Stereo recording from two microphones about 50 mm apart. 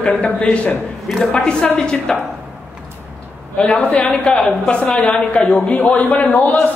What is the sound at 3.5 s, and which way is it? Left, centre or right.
A man's voice, left.